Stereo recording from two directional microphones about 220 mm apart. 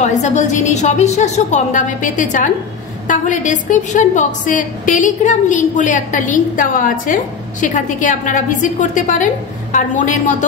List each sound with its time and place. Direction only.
0.0 s a woman's voice: 30° left (ahead or behind)